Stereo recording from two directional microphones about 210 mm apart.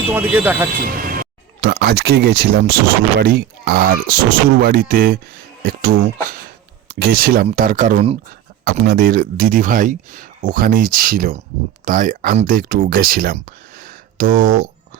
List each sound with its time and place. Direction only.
0.1 s speech: 10° right (ahead or behind)
0.9 s speech: 45° right (ahead or behind)
8.8 s speech: 45° right (ahead or behind)